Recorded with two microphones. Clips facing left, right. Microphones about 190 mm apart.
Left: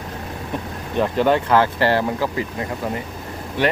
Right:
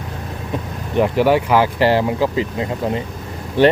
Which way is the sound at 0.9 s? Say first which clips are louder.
Right 3 dB; 15° right (ahead or behind).